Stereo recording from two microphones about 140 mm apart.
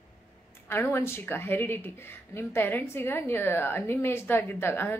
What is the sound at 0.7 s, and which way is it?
Speech, 15° left (ahead or behind).